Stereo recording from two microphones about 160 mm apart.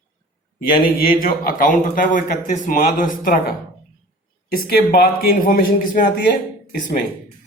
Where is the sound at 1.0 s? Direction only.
65° left (ahead or behind).